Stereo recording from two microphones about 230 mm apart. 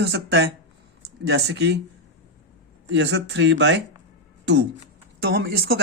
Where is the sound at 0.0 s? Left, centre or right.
Right.